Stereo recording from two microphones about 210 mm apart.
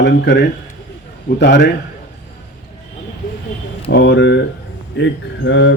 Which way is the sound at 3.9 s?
55° left (ahead or behind).